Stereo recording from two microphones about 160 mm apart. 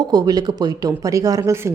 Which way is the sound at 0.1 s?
25° right (ahead or behind).